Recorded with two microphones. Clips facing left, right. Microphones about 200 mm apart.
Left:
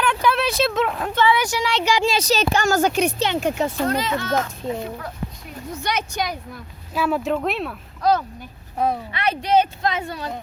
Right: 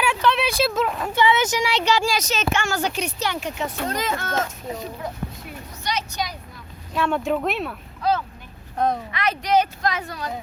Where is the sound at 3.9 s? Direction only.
50° right (ahead or behind).